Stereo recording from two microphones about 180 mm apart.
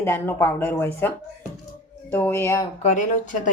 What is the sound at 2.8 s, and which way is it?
Speech, 45° left (ahead or behind).